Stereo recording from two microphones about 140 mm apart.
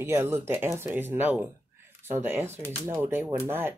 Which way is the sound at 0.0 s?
20° right (ahead or behind).